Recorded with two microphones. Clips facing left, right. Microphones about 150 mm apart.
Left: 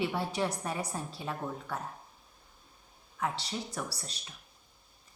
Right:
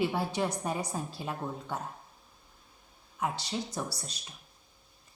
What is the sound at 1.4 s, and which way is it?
Speech, 15° right (ahead or behind).